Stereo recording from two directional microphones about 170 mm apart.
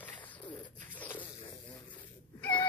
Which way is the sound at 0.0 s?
10° left (ahead or behind).